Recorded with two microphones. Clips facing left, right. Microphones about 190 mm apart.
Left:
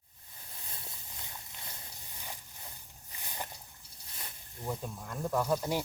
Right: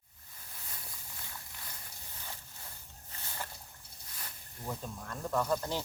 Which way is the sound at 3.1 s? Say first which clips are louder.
Left 1 dB; 15° left (ahead or behind).